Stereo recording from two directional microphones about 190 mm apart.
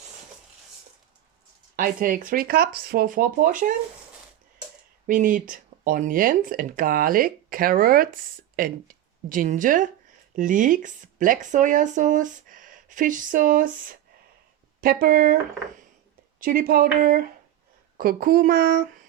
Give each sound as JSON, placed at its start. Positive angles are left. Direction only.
{"t": 1.7, "sound": "speech", "side_deg": -45}
{"t": 5.0, "sound": "speech", "side_deg": -45}
{"t": 16.4, "sound": "speech", "side_deg": -50}